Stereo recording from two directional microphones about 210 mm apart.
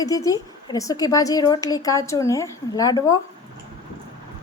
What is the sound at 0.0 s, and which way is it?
A woman's voice, 15° left (ahead or behind).